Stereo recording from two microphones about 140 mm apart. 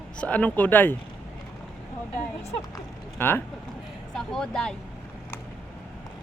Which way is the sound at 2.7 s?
15° left (ahead or behind).